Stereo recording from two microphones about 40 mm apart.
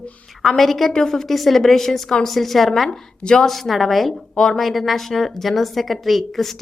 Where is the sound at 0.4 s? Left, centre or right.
Centre.